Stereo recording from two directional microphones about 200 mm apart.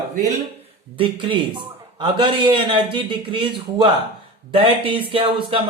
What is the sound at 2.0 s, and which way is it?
A man's voice, 25° right (ahead or behind).